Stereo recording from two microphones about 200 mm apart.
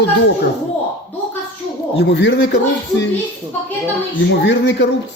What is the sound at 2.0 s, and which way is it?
Speech, 60° left (ahead or behind).